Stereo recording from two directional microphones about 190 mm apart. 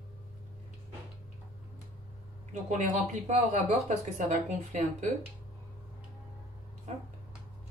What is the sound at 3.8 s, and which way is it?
Speech, 40° right (ahead or behind).